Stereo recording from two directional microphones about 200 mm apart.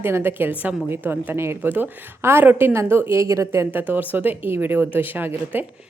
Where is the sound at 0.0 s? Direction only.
10° right (ahead or behind).